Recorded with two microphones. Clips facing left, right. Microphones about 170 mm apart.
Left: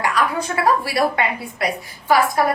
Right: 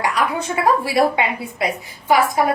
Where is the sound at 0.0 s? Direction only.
20° right (ahead or behind).